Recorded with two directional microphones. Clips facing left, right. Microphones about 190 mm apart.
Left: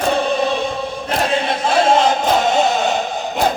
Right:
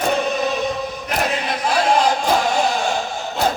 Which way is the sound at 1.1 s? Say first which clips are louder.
Left 4 dB; 25° left (ahead or behind).